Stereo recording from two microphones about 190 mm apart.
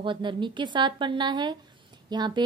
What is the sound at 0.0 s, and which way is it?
Speech, 25° right (ahead or behind).